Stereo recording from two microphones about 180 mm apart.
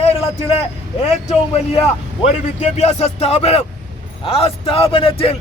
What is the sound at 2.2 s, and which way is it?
Speech, 40° left (ahead or behind).